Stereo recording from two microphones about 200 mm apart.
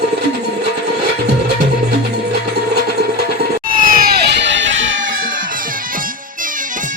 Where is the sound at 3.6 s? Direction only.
45° right (ahead or behind); by 4.9 s 70° right (ahead or behind).